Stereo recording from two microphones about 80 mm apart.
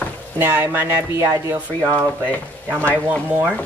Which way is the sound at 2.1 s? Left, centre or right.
Left.